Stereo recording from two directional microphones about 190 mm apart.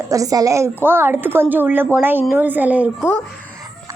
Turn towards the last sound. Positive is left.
turn(degrees=-5)  # may be behind; listen again after turning